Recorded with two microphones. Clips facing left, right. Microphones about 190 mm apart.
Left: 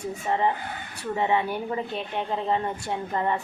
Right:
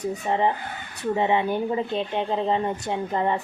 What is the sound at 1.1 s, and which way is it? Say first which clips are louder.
Speech: right 2 dB; 20° right (ahead or behind).